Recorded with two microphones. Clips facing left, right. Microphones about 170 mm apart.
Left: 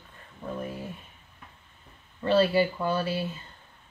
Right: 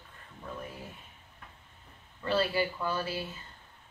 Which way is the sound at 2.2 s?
20° left (ahead or behind).